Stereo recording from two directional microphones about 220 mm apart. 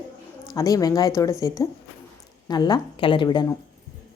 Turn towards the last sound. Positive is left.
turn(degrees=20)  # may be behind; listen again after turning